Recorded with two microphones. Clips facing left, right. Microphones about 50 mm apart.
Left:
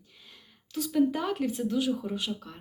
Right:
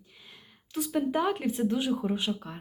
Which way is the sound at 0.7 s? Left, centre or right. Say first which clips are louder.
Left 2 dB; centre.